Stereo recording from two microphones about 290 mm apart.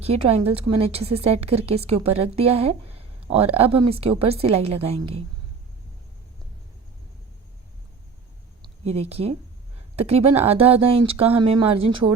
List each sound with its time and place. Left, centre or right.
0.0 s a woman's voice: right
8.8 s a woman's voice: right